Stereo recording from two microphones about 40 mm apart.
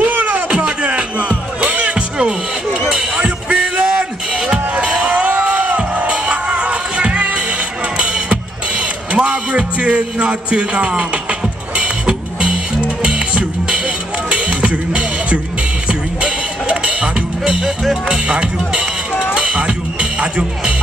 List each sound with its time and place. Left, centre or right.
0.0 s music: right
0.6 s music: right
2.9 s a sound: right
4.3 s music: centre